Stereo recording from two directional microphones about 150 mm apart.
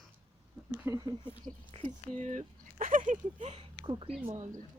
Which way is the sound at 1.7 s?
45° right (ahead or behind).